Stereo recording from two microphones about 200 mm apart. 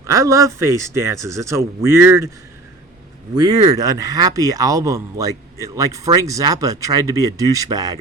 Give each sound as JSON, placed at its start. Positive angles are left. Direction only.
{"t": 0.0, "sound": "speech", "side_deg": -15}
{"t": 3.3, "sound": "speech", "side_deg": -20}